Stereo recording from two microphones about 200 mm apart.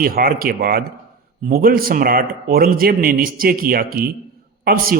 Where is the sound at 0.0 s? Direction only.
45° right (ahead or behind).